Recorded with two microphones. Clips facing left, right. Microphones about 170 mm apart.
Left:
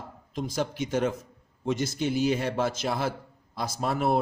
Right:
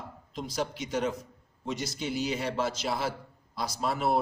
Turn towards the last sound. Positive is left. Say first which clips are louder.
# left 2 dB
turn(degrees=50)  # may be behind; listen again after turning